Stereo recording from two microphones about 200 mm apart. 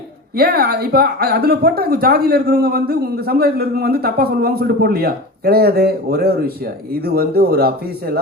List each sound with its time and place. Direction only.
0.3 s a woman's voice: 50° right (ahead or behind)